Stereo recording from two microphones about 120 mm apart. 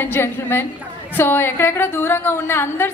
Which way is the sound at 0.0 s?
20° left (ahead or behind).